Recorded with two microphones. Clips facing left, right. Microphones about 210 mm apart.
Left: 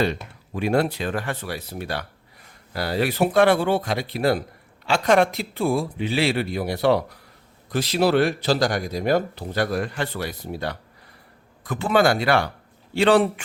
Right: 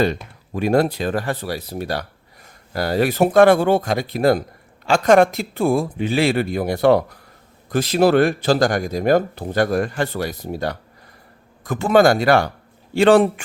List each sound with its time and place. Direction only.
0.5 s speech: 40° right (ahead or behind)